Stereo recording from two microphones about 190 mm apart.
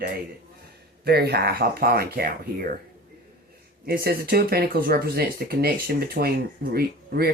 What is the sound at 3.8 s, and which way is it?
Speech, 50° right (ahead or behind).